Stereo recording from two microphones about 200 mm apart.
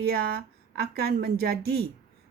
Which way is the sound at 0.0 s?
50° right (ahead or behind).